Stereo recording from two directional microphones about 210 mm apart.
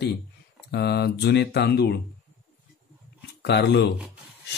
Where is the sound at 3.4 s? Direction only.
55° left (ahead or behind).